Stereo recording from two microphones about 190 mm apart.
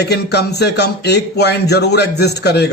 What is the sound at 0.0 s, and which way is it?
Speech, 60° left (ahead or behind).